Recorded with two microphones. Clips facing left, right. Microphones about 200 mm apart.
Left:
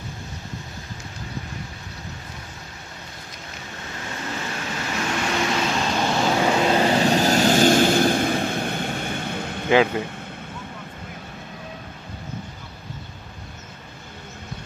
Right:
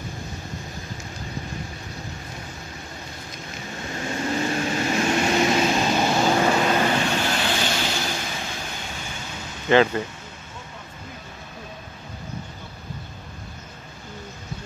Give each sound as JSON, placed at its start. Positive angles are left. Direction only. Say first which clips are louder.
{"t": 4.0, "sound": "vehicle", "louder": "right 7 dB", "side_deg": -25}
{"t": 5.8, "sound": "vehicle", "louder": "right 2 dB", "side_deg": -10}
{"t": 6.7, "sound": "vehicle", "louder": "left 3 dB", "side_deg": 30}
{"t": 9.7, "sound": "speech", "louder": "even", "side_deg": 10}